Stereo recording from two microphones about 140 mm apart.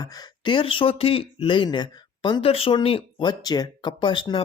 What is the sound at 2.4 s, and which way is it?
Speech, 45° left (ahead or behind).